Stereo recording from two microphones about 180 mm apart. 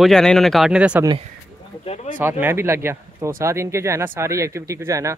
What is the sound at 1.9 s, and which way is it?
Speech, 35° left (ahead or behind).